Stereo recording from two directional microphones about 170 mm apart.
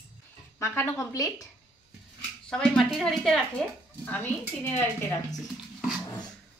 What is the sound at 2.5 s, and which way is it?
A woman's voice, 5° left (ahead or behind).